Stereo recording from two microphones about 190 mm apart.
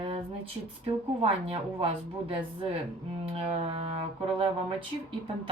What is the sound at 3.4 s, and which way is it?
Music, 30° right (ahead or behind).